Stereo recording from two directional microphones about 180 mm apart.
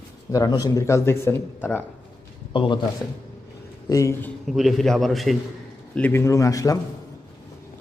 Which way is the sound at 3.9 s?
15° left (ahead or behind).